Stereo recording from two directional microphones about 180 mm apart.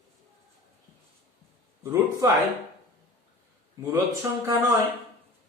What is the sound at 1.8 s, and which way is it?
Speech, 20° right (ahead or behind).